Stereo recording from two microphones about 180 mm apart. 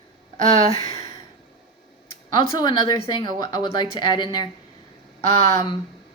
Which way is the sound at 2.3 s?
25° left (ahead or behind).